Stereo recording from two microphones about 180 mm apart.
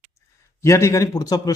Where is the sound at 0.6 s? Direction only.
15° left (ahead or behind).